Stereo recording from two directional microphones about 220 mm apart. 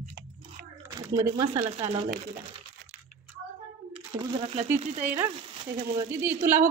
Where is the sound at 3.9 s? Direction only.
25° right (ahead or behind).